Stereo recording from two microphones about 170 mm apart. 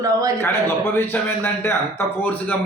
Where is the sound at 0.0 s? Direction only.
20° right (ahead or behind).